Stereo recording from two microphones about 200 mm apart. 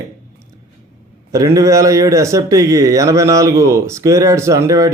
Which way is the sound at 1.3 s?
15° right (ahead or behind).